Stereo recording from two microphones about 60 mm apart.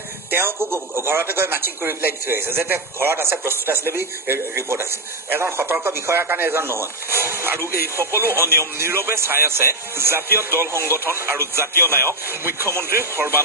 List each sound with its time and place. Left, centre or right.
0.3 s a man's voice: right